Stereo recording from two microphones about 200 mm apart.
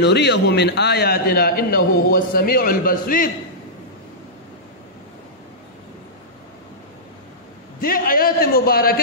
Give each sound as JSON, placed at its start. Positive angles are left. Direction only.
{"t": 0.0, "sound": "a man's voice", "side_deg": 55}
{"t": 7.8, "sound": "a man's voice", "side_deg": 45}